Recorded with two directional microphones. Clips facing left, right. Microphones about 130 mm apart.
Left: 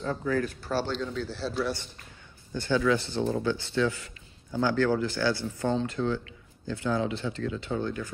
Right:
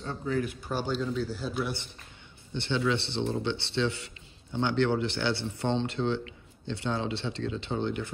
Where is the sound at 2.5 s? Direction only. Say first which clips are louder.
Left 3 dB; 25° right (ahead or behind).